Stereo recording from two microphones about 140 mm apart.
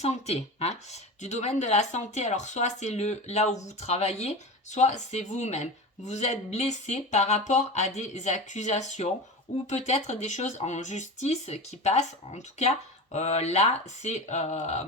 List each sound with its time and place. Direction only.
0.0 s speech: 50° left (ahead or behind)